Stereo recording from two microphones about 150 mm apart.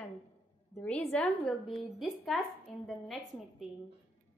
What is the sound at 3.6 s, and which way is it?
Speech, centre (ahead or behind).